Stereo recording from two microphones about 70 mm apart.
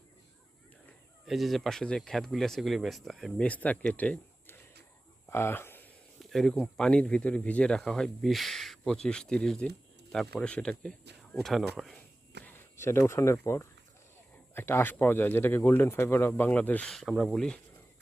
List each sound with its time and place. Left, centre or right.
1.3 s speech: centre
3.3 s speech: centre
5.3 s a sound: left
6.1 s a sound: centre
6.7 s speech: centre
12.5 s speech: left
16.9 s speech: centre